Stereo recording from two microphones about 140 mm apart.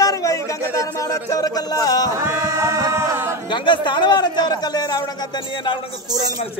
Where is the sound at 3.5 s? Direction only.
35° left (ahead or behind).